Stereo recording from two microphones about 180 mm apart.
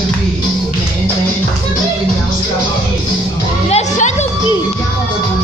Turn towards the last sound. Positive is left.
turn(degrees=40)  # may be behind; listen again after turning